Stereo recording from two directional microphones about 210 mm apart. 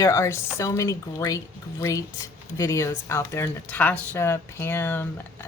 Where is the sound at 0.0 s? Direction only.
15° left (ahead or behind).